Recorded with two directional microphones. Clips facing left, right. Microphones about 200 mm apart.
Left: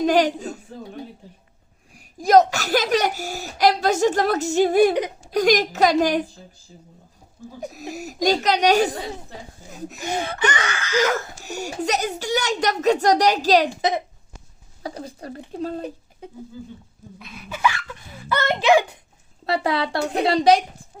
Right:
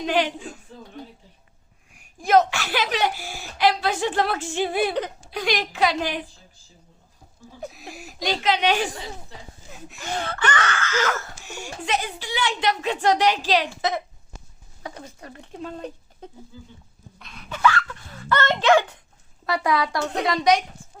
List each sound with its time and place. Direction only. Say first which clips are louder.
0.0 s speech: left 5 dB; 40° left (ahead or behind)
1.9 s a woman's voice: left 3 dB; 35° left (ahead or behind)
7.7 s speech: left 8 dB; 40° left (ahead or behind)
10.0 s speech: left 3 dB; 15° left (ahead or behind)
11.4 s speech: left 7 dB; 40° left (ahead or behind)
13.7 s speech: left 3 dB; 20° left (ahead or behind)
14.8 s speech: left 6 dB; 35° left (ahead or behind)
17.2 s speech: left 1 dB; 5° left (ahead or behind)
19.5 s a woman's voice: left 1 dB; 30° left (ahead or behind)